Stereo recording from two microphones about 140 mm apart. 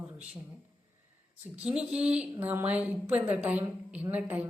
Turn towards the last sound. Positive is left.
turn(degrees=-10)  # may be behind; listen again after turning